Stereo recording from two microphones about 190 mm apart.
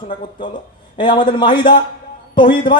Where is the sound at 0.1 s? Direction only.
25° left (ahead or behind).